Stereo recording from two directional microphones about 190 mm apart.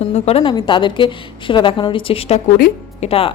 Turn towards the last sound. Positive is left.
turn(degrees=35)  # may be behind; listen again after turning